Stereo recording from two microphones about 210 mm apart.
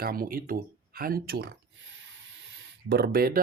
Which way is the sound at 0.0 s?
45° right (ahead or behind).